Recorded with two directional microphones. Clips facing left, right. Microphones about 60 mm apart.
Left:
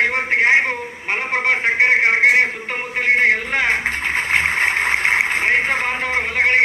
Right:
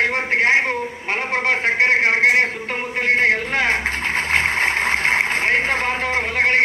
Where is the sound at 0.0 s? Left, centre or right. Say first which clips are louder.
Left 1 dB; centre.